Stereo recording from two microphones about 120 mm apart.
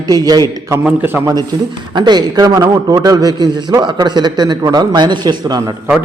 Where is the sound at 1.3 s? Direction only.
35° right (ahead or behind).